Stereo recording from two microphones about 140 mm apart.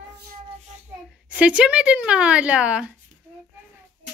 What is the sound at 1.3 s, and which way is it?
A woman's voice, 10° right (ahead or behind).